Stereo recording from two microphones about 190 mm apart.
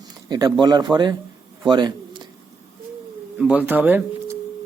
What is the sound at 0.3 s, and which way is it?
Speech, 20° right (ahead or behind).